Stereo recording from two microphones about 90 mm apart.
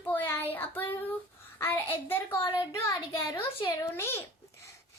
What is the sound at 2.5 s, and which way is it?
Speech, 40° left (ahead or behind).